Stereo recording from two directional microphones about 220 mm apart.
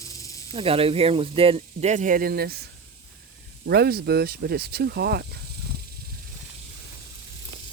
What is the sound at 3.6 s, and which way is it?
Speech, 45° right (ahead or behind).